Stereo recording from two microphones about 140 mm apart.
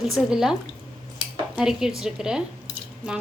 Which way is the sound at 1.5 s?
5° right (ahead or behind).